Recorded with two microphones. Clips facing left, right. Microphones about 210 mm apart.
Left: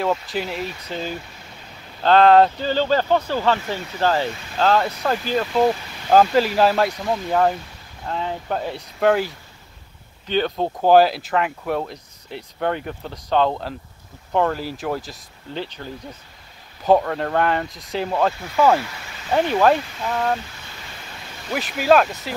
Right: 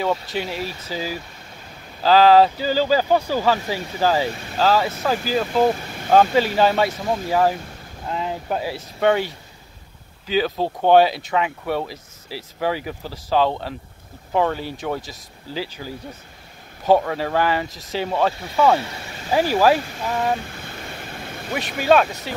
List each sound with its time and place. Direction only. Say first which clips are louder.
0.0 s speech: even; centre (ahead or behind)
18.8 s speech: right 1 dB; 25° right (ahead or behind)
19.3 s speech: even; 5° right (ahead or behind)
21.5 s speech: left 1 dB; centre (ahead or behind)